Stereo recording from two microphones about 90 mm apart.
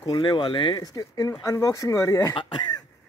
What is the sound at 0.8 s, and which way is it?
Speech, 40° left (ahead or behind).